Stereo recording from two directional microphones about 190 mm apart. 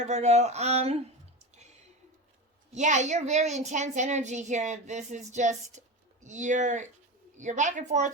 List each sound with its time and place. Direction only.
0.0 s a woman's voice: 35° right (ahead or behind)
1.5 s a sound: 35° right (ahead or behind)
2.7 s a woman's voice: 40° right (ahead or behind)